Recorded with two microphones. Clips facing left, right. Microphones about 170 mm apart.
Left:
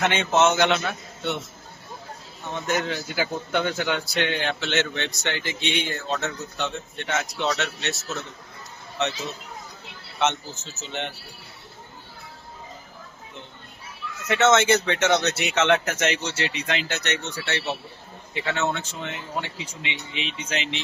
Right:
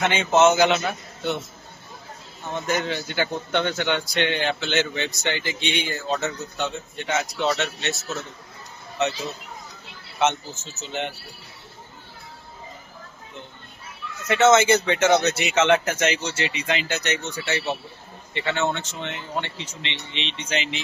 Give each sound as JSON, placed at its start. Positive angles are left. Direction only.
{"t": 0.0, "sound": "a man's voice", "side_deg": 0}
{"t": 10.2, "sound": "a man's voice", "side_deg": 0}
{"t": 14.3, "sound": "a man's voice", "side_deg": 0}